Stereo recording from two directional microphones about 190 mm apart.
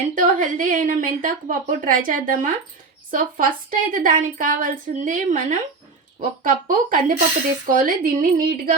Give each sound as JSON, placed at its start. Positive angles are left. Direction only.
{"t": 0.1, "sound": "a woman's voice", "side_deg": -45}